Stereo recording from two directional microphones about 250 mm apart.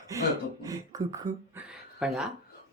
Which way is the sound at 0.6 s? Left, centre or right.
Centre.